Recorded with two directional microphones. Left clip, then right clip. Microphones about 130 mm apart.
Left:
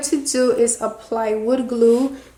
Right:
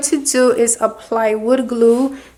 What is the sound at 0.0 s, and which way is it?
Speech, 35° right (ahead or behind).